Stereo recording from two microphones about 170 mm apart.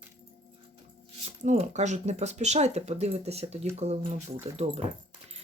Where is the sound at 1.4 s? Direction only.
40° right (ahead or behind).